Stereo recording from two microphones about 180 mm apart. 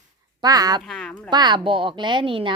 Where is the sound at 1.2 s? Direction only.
25° right (ahead or behind).